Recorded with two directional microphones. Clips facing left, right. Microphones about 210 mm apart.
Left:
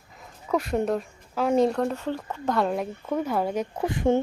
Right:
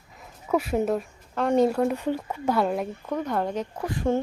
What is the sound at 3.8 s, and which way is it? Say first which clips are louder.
Speech: left 3 dB; 20° left (ahead or behind).